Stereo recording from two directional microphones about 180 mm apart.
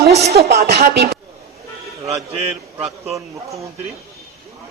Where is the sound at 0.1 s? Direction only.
35° right (ahead or behind).